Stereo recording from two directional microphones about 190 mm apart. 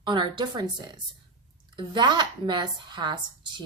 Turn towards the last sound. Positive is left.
turn(degrees=-25)  # may be behind; listen again after turning